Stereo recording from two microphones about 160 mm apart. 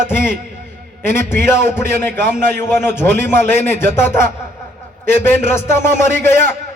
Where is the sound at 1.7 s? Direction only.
15° left (ahead or behind).